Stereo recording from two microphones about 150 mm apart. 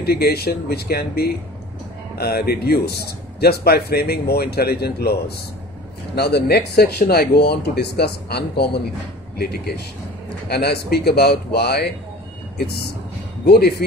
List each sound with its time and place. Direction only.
0.0 s speech: 90° left
6.1 s speech: 90° left